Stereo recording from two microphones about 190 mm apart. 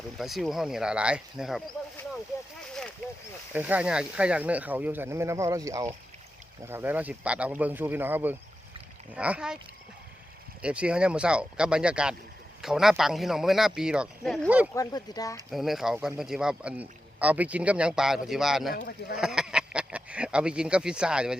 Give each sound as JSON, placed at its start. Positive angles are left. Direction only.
{"t": 0.2, "sound": "speech", "side_deg": 0}
{"t": 3.5, "sound": "speech", "side_deg": -10}
{"t": 10.6, "sound": "speech", "side_deg": -5}
{"t": 14.7, "sound": "speech", "side_deg": 20}
{"t": 15.4, "sound": "speech", "side_deg": 0}
{"t": 18.7, "sound": "speech", "side_deg": 55}
{"t": 19.1, "sound": "speech", "side_deg": -5}